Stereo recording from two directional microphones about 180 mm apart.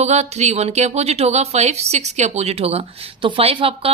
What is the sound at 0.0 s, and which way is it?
Speech, 40° right (ahead or behind).